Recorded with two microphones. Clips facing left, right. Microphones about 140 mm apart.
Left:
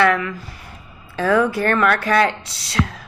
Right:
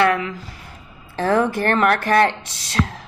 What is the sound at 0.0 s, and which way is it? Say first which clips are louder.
Speech: left 1 dB; 20° right (ahead or behind).